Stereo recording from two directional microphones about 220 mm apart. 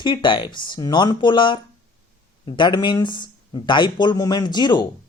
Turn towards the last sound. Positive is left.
turn(degrees=20)  # may be behind; listen again after turning